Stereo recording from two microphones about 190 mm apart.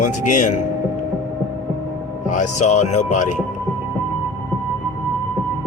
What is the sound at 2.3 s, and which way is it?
Music, 40° left (ahead or behind).